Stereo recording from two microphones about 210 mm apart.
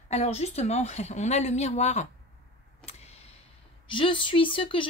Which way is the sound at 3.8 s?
25° left (ahead or behind).